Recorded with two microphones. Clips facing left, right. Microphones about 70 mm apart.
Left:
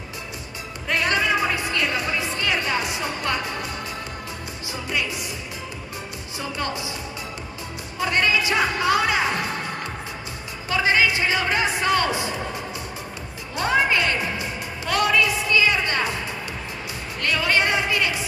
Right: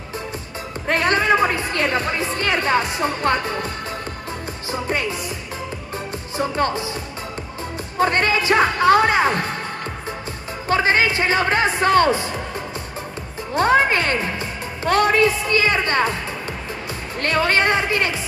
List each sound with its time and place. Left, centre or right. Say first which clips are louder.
0.8 s music: right 4 dB; right
6.3 s music: right 8 dB; right
8.0 s speech: right 3 dB; right
10.7 s a man's voice: right 3 dB; right
13.6 s a woman's voice: right 4 dB; right
17.2 s a woman's voice: right 3 dB; right